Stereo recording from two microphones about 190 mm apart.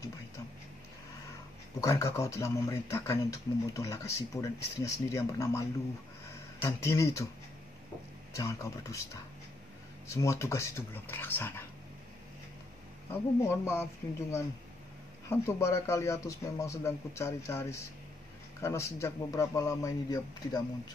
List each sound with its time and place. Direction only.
1.8 s speech: 15° left (ahead or behind)
8.4 s speech: 15° left (ahead or behind)
13.1 s speech: 10° left (ahead or behind)
15.2 s speech: 15° left (ahead or behind)